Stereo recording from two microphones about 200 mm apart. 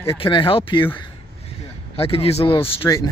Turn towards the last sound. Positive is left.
turn(degrees=15)  # may be behind; listen again after turning